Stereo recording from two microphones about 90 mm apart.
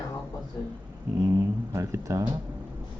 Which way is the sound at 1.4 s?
30° right (ahead or behind).